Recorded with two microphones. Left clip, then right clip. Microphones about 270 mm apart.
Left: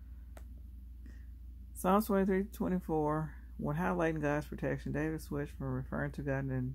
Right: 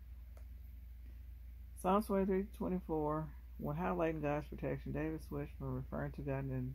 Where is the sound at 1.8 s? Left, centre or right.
Left.